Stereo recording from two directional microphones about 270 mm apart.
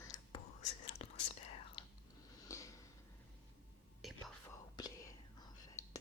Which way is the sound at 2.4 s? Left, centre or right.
Centre.